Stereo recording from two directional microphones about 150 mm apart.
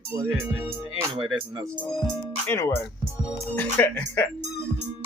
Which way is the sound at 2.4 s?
20° left (ahead or behind).